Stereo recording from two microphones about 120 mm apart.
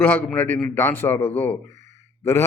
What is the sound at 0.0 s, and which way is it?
A man's voice, 15° left (ahead or behind).